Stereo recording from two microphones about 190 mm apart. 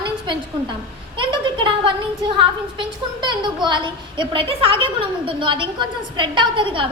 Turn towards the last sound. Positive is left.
turn(degrees=-25)  # may be behind; listen again after turning